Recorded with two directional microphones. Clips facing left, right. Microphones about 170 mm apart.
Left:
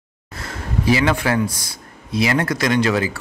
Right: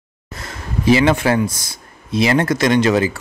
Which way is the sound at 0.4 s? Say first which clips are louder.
Left 1 dB; 20° right (ahead or behind).